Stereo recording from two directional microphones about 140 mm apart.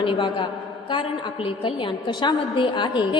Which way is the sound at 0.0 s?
35° left (ahead or behind).